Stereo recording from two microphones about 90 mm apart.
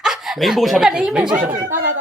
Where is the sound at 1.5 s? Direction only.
30° right (ahead or behind).